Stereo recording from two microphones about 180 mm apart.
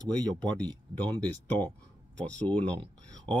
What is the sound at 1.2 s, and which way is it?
Speech, 10° left (ahead or behind).